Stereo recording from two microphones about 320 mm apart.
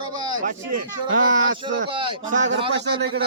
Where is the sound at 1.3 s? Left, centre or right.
Right.